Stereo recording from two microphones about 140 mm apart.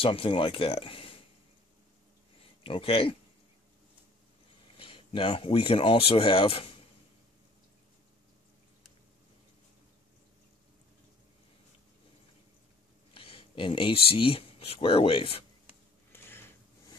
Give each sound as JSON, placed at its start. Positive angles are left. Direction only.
{"t": 0.0, "sound": "speech", "side_deg": 40}
{"t": 2.4, "sound": "speech", "side_deg": 40}
{"t": 4.7, "sound": "speech", "side_deg": 40}
{"t": 13.1, "sound": "a sound", "side_deg": 40}
{"t": 14.1, "sound": "speech", "side_deg": 40}
{"t": 16.1, "sound": "a sound", "side_deg": 15}